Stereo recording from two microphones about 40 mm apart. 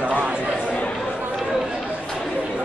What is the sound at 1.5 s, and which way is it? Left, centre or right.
Run, centre.